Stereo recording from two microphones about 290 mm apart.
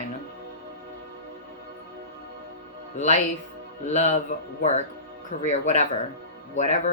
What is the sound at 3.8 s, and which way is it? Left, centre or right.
A woman's voice, left.